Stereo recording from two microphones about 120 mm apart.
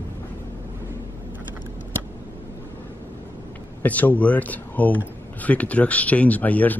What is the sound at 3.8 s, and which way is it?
Speech, 15° left (ahead or behind).